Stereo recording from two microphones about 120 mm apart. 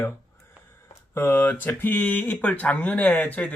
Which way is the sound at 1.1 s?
20° left (ahead or behind).